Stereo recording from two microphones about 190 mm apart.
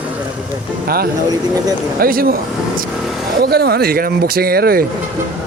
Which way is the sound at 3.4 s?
55° right (ahead or behind).